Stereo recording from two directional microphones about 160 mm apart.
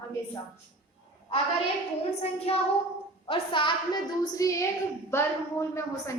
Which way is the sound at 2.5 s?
40° left (ahead or behind).